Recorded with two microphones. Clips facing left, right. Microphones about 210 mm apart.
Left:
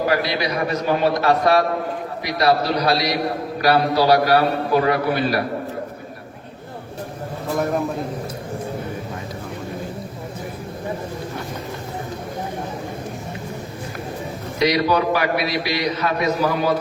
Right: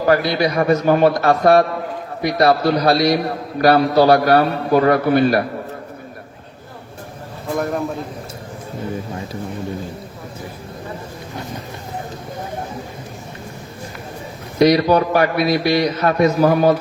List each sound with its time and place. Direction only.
0.1 s a man's voice: 50° right (ahead or behind)
7.5 s a man's voice: centre (ahead or behind)
14.6 s a man's voice: 50° right (ahead or behind)